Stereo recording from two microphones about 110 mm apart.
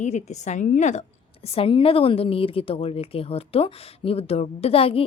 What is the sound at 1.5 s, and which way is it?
Speech, 55° left (ahead or behind).